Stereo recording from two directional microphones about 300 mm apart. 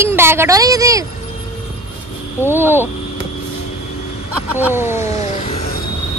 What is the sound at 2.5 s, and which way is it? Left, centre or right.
Speech, centre.